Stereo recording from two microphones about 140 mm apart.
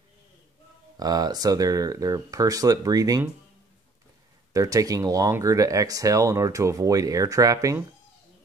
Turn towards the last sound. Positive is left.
turn(degrees=-25)  # may be behind; listen again after turning